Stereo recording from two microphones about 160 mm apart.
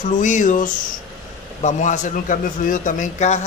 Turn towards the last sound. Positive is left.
turn(degrees=50)  # may be behind; listen again after turning